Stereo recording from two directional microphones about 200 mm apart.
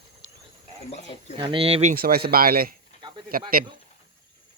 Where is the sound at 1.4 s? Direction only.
25° right (ahead or behind); by 2.7 s 50° right (ahead or behind).